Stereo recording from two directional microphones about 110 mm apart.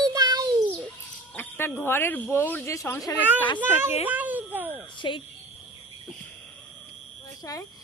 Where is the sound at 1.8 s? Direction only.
20° left (ahead or behind).